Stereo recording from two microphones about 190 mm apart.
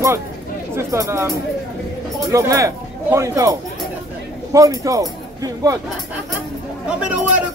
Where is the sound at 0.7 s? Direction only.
15° right (ahead or behind).